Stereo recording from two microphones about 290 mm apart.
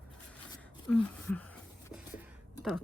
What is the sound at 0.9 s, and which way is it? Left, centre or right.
Speech, centre.